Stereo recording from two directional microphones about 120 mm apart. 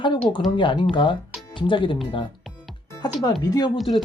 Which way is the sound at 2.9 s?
30° left (ahead or behind).